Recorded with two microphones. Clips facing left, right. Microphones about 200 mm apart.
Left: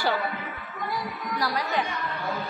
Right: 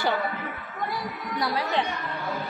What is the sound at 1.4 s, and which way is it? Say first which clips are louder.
Speech: right 1 dB; 30° right (ahead or behind).